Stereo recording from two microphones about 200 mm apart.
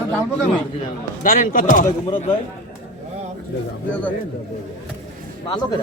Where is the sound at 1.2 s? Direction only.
45° left (ahead or behind).